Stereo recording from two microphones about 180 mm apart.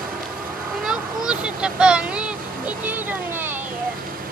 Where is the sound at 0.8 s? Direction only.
5° right (ahead or behind).